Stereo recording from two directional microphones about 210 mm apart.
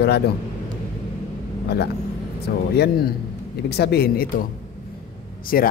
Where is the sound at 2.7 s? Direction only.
50° left (ahead or behind).